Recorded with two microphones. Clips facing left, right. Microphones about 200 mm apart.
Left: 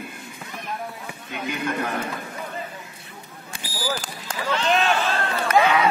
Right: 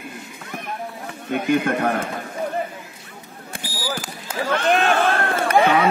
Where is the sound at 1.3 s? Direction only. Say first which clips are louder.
Right 8 dB; 55° right (ahead or behind).